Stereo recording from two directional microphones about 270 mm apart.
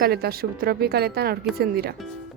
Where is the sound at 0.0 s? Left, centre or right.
Right.